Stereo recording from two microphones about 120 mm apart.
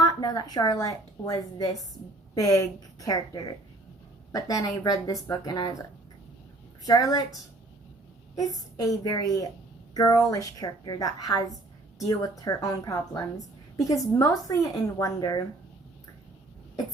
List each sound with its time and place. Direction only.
0.0 s a woman's voice: 35° left (ahead or behind)
6.8 s a woman's voice: 30° left (ahead or behind)
8.4 s a woman's voice: 30° left (ahead or behind)